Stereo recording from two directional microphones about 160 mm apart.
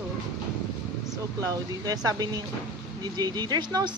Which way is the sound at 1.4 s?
20° right (ahead or behind).